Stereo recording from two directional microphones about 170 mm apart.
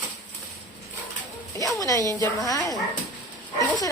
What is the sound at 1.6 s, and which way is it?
Speech, 20° left (ahead or behind).